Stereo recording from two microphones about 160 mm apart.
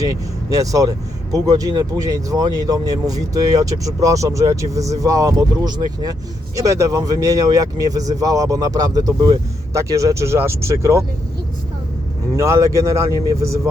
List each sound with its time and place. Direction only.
0.0 s speech: 20° right (ahead or behind)
12.4 s speech: 20° right (ahead or behind)